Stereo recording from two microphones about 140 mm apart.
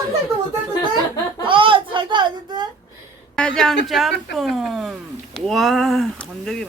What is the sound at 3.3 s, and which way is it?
Speech, 5° left (ahead or behind).